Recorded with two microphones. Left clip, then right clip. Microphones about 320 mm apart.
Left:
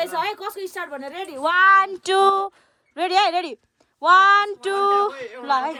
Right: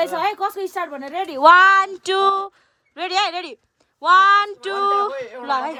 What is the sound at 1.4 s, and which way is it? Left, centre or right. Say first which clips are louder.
Speech: right 9 dB; centre.